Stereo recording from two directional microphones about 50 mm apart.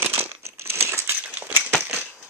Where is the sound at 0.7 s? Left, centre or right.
Right.